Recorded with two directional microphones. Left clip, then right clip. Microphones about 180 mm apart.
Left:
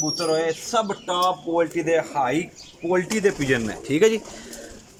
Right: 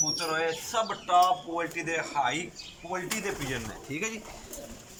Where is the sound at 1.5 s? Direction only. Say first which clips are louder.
Left 10 dB; 50° left (ahead or behind).